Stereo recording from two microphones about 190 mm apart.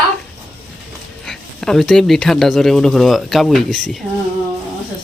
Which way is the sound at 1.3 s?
Centre (ahead or behind).